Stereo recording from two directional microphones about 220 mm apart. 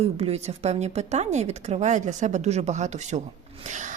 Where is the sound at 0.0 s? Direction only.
25° right (ahead or behind).